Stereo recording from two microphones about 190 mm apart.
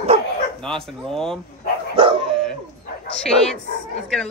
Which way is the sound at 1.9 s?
30° right (ahead or behind).